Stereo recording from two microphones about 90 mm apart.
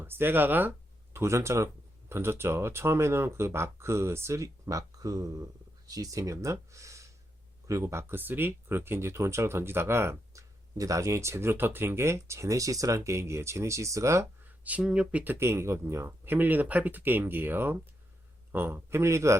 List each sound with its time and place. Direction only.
0.0 s speech: 25° right (ahead or behind)
1.1 s speech: 35° right (ahead or behind)
14.6 s speech: 15° right (ahead or behind); by 19.4 s 35° right (ahead or behind)